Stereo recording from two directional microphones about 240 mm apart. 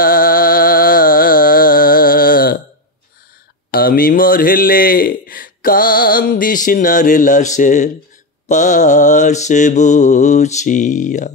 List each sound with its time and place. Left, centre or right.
0.0 s music: left
3.7 s a man's voice: left
8.5 s mantra: left